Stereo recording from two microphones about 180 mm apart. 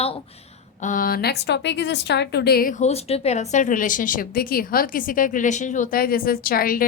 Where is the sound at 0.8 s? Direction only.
50° left (ahead or behind).